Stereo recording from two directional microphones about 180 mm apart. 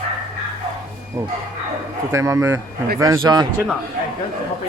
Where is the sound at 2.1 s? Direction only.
15° right (ahead or behind).